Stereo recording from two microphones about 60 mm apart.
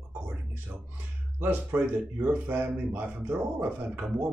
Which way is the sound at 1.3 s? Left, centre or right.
Right.